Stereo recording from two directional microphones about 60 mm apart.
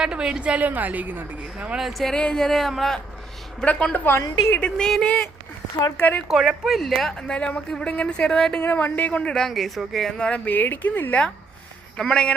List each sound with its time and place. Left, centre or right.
0.0 s a woman's voice: centre; by 1.5 s right
1.5 s speech: centre
1.8 s speech: centre
2.1 s a woman's voice: centre
3.6 s a woman's voice: centre
3.9 s a woman's voice: left
4.6 s a woman's voice: centre
6.0 s speech: left
6.2 s speech: centre
7.3 s a woman's voice: centre
8.6 s a woman's voice: left; by 10.2 s centre
10.2 s speech: centre
11.9 s a woman's voice: centre